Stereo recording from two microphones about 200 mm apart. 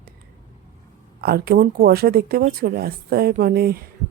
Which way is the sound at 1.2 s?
50° right (ahead or behind).